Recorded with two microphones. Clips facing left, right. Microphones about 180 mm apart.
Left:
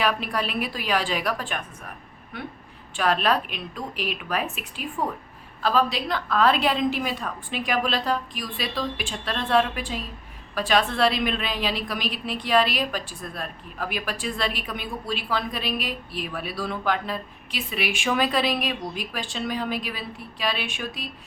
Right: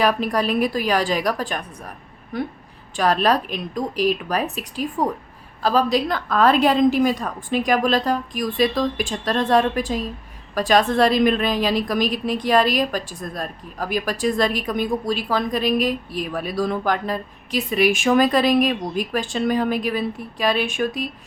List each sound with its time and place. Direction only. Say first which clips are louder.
0.0 s a woman's voice: right 6 dB; 40° right (ahead or behind)